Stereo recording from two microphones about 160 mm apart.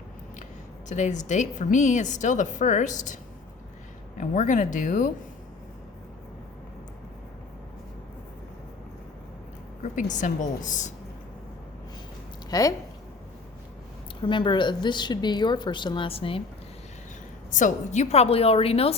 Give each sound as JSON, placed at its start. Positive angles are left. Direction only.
{"t": 0.9, "sound": "a woman's voice", "side_deg": 50}
{"t": 4.2, "sound": "a woman's voice", "side_deg": 50}
{"t": 9.8, "sound": "a woman's voice", "side_deg": 50}
{"t": 12.5, "sound": "a woman's voice", "side_deg": 20}
{"t": 14.2, "sound": "a woman's voice", "side_deg": 30}
{"t": 17.5, "sound": "a woman's voice", "side_deg": 55}